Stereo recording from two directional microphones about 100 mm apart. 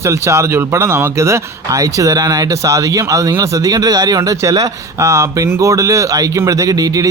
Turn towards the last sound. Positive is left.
turn(degrees=-40)  # may be behind; listen again after turning